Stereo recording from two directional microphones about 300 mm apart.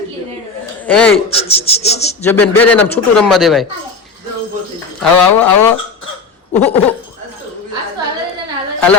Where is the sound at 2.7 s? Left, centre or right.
Centre.